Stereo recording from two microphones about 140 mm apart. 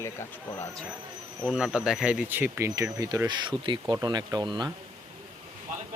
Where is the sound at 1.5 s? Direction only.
5° right (ahead or behind); by 4.7 s 30° right (ahead or behind).